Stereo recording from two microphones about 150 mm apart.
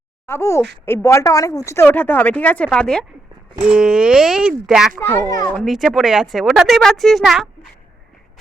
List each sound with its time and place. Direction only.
0.3 s speech: 20° left (ahead or behind); by 4.9 s 5° right (ahead or behind)
4.9 s speech: 15° left (ahead or behind)
5.5 s speech: centre (ahead or behind)